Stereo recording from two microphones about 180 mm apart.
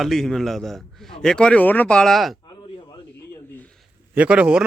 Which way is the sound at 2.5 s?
25° left (ahead or behind).